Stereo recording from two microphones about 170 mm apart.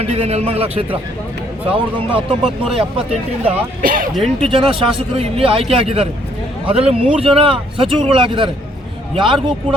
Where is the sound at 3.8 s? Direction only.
50° right (ahead or behind).